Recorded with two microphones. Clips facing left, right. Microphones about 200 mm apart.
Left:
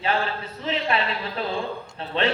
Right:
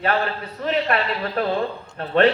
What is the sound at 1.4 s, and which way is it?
Speech, 55° right (ahead or behind).